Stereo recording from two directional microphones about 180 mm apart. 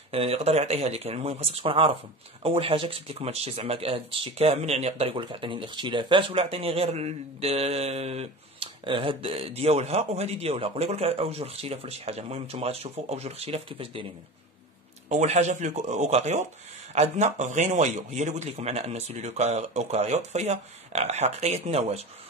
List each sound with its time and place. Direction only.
0.1 s speech: 35° right (ahead or behind)
15.0 s speech: 35° right (ahead or behind)